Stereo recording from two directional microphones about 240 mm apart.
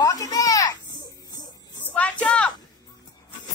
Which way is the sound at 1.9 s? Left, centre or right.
Centre.